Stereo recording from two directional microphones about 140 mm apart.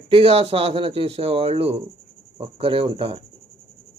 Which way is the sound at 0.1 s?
40° right (ahead or behind).